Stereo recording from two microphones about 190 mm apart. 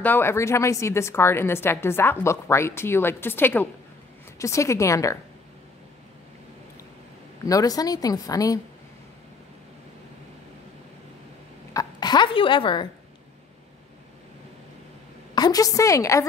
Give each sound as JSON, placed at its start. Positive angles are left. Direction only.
{"t": 0.0, "sound": "a woman's voice", "side_deg": 10}
{"t": 7.4, "sound": "a woman's voice", "side_deg": 20}
{"t": 11.7, "sound": "speech", "side_deg": 20}
{"t": 15.3, "sound": "a woman's voice", "side_deg": 20}